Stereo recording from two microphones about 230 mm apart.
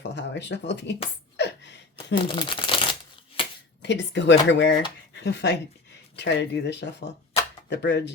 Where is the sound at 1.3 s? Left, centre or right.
Left.